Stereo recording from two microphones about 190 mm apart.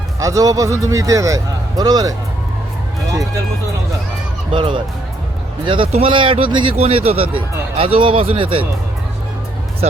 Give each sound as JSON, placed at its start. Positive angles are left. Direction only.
{"t": 0.2, "sound": "a man's voice", "side_deg": -15}
{"t": 4.5, "sound": "speech", "side_deg": -25}